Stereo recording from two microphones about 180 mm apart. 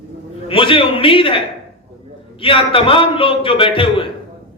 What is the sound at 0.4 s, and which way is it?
Speech, 30° left (ahead or behind).